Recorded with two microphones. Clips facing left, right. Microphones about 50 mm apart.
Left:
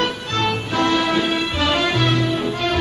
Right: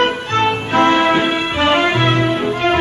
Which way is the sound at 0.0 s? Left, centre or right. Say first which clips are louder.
Right 6 dB; right.